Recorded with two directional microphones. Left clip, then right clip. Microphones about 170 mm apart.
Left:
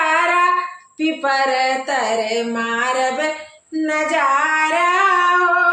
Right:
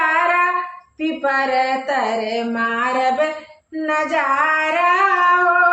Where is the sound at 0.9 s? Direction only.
30° left (ahead or behind).